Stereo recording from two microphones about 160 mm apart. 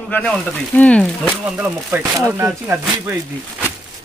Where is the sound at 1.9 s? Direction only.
15° right (ahead or behind).